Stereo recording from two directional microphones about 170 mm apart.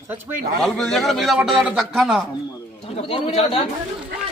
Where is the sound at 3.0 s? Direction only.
35° left (ahead or behind).